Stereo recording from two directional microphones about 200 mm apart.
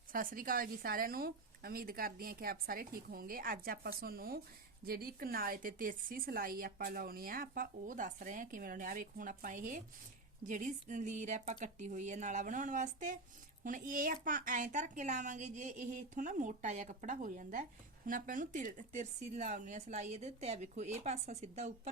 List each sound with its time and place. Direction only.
0.1 s a woman's voice: 45° right (ahead or behind)